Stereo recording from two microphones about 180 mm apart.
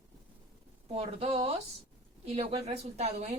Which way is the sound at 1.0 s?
35° right (ahead or behind).